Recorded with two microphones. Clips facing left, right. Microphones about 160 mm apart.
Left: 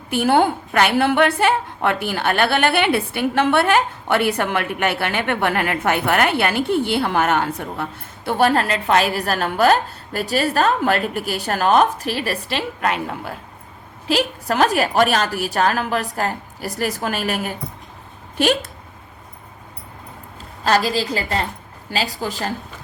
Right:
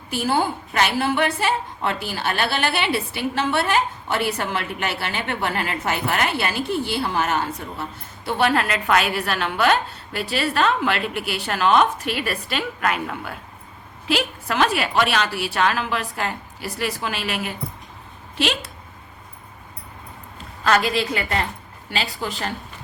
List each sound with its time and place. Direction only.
0.1 s a woman's voice: 60° left (ahead or behind)
20.7 s a woman's voice: 35° left (ahead or behind)